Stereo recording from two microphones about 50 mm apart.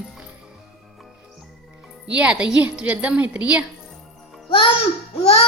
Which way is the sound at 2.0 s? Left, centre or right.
Right.